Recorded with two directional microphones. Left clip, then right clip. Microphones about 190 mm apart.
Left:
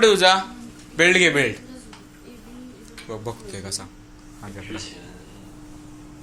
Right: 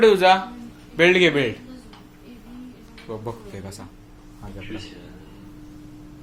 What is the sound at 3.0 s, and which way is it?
Speech, 10° right (ahead or behind).